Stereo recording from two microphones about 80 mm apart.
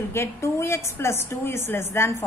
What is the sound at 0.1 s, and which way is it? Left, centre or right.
A woman's voice, left.